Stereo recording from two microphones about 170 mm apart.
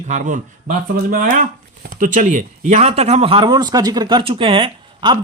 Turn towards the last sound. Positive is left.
turn(degrees=-30)  # may be behind; listen again after turning